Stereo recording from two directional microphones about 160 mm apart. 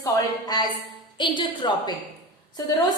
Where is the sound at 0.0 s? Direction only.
25° left (ahead or behind).